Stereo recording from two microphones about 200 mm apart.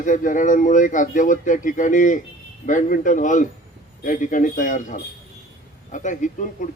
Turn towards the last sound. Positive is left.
turn(degrees=40)  # may be behind; listen again after turning